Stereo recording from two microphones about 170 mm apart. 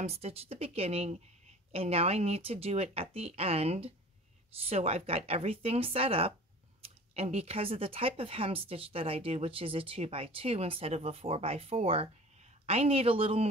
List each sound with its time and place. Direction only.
0.0 s speech: 35° right (ahead or behind)